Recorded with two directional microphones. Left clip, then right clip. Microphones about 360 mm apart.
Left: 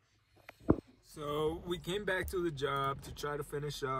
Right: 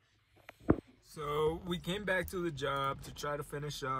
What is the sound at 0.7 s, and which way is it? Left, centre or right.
Speech, centre.